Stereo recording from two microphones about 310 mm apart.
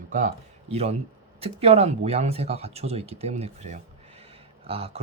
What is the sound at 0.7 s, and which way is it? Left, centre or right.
Speech, centre.